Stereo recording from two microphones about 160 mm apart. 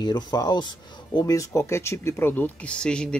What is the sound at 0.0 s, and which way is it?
Speech, 25° left (ahead or behind).